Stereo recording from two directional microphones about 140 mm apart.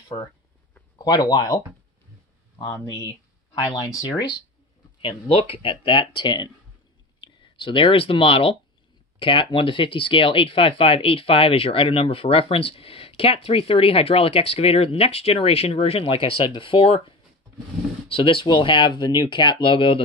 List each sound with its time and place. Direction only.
0.9 s speech: 30° left (ahead or behind)
2.6 s speech: 25° left (ahead or behind)
5.0 s speech: 40° left (ahead or behind)